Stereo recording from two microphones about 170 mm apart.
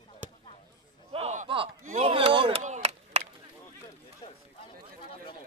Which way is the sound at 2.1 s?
30° right (ahead or behind).